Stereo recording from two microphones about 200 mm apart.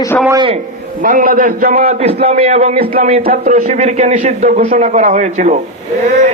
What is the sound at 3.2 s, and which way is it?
A man's voice, 45° right (ahead or behind).